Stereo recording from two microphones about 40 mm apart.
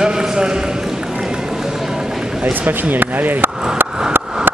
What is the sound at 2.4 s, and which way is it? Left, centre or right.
Speech, right.